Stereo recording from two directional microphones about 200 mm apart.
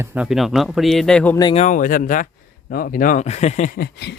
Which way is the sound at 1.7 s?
40° left (ahead or behind).